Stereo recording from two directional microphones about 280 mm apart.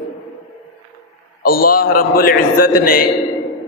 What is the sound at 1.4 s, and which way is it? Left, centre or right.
A man's voice, left.